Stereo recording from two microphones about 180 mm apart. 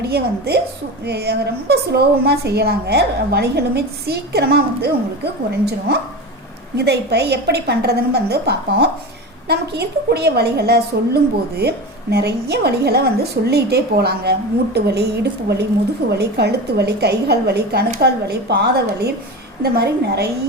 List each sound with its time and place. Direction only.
0.0 s a woman's voice: 65° right (ahead or behind)